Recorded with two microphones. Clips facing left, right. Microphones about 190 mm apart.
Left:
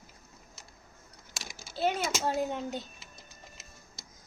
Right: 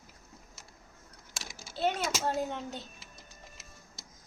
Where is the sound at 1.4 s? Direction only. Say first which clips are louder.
Left 1 dB; centre (ahead or behind).